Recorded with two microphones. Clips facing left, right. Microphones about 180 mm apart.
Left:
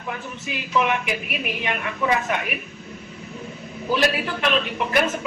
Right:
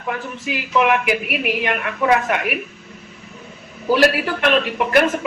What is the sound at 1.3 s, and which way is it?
Speech, 5° right (ahead or behind).